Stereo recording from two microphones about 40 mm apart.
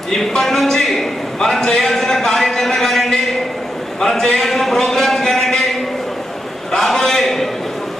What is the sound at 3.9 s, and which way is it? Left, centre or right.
A man's voice, centre.